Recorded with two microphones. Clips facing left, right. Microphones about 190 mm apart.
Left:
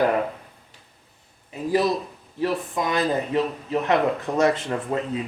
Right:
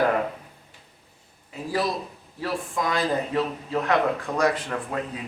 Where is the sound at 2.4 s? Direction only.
20° left (ahead or behind).